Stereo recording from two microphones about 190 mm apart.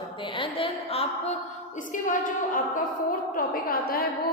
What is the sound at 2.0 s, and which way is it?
A woman's voice, 45° left (ahead or behind).